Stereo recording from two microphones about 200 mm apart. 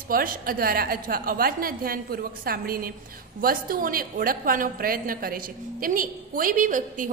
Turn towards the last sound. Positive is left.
turn(degrees=-40)  # may be behind; listen again after turning